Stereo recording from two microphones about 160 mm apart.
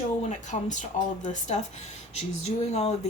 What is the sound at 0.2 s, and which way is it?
Speech, 50° left (ahead or behind).